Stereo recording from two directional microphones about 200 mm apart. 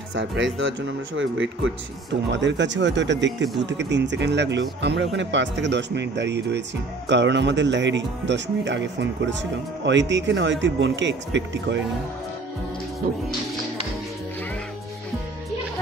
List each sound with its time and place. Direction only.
0.1 s speech: 70° right (ahead or behind)
13.0 s speech: 45° right (ahead or behind)